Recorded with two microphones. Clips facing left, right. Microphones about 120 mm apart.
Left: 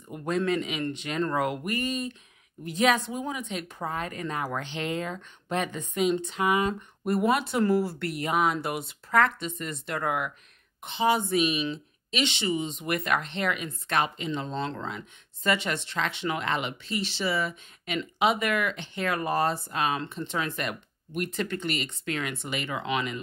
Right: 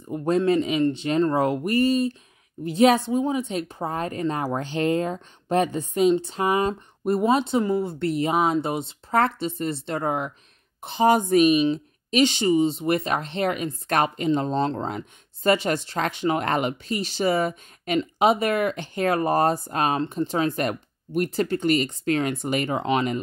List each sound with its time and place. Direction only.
0.1 s speech: 30° right (ahead or behind)
10.8 s speech: 40° right (ahead or behind)